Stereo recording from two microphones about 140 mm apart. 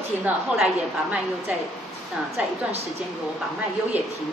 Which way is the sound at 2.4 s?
10° right (ahead or behind).